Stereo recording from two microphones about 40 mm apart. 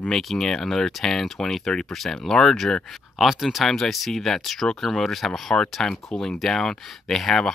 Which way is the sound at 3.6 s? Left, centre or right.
Centre.